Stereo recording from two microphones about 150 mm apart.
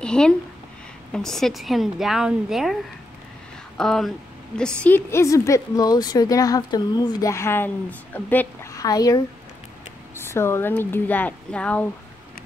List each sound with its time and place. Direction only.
0.0 s a sound: 5° left (ahead or behind)
1.1 s a woman's voice: 5° left (ahead or behind)
4.8 s a woman's voice: 15° left (ahead or behind)
8.7 s speech: 25° left (ahead or behind); by 11.8 s 10° left (ahead or behind)